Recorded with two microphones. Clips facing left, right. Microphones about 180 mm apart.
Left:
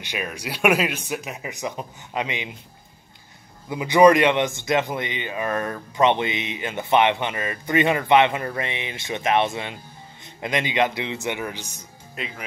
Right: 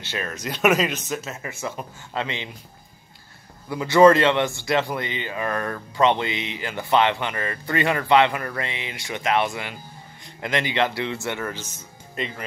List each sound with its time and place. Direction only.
0.0 s speech: 15° left (ahead or behind)
3.6 s a man's voice: 15° left (ahead or behind)